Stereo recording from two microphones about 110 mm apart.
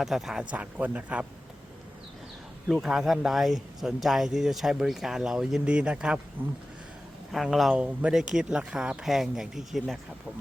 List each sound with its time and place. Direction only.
0.0 s speech: 5° right (ahead or behind)
2.6 s speech: 5° right (ahead or behind)
7.3 s speech: centre (ahead or behind)